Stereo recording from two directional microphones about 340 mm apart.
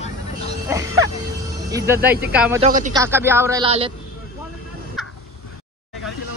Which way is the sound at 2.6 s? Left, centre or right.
Right.